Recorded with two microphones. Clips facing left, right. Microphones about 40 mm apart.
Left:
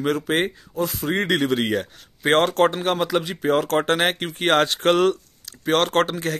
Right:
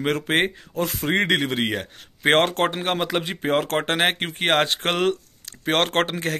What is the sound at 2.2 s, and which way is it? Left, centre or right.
Speech, right.